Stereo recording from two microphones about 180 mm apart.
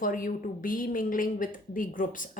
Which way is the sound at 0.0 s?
50° left (ahead or behind).